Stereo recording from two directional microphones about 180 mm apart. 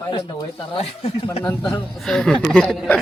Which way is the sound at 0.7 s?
35° left (ahead or behind).